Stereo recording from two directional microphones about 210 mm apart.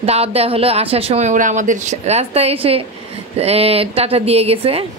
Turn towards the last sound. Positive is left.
turn(degrees=-25)  # may be behind; listen again after turning